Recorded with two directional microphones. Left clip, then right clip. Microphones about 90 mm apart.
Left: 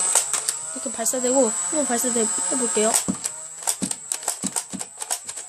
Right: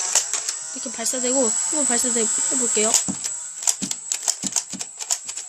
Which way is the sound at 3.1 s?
20° right (ahead or behind).